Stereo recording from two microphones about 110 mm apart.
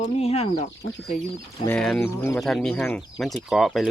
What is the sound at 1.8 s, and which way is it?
Speech, 5° left (ahead or behind).